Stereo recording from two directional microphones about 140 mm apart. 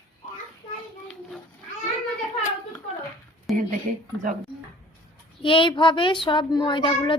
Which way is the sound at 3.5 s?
Centre (ahead or behind).